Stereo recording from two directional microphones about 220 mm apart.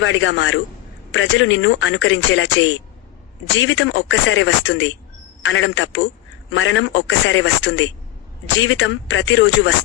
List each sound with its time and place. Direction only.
0.0 s speech: 60° left (ahead or behind)